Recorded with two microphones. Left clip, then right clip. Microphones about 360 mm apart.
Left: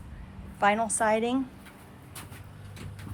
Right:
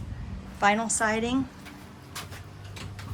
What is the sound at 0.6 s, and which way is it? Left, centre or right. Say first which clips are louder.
Speech: right 1 dB; centre.